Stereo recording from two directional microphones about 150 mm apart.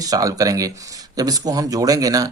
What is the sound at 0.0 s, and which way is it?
Speech, 25° right (ahead or behind).